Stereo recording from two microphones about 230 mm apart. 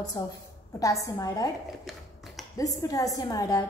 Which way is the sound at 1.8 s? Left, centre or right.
Centre.